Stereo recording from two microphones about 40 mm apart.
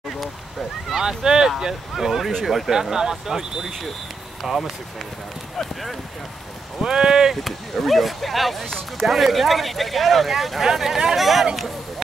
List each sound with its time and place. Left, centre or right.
1.0 s speech: centre
4.4 s speech: centre
6.8 s speech: centre
7.4 s speech: centre
8.6 s speech: centre
9.0 s speech: centre